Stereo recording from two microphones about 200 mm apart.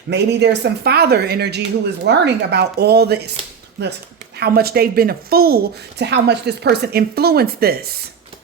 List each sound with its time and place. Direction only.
0.1 s speech: 55° right (ahead or behind)
4.4 s speech: 50° right (ahead or behind)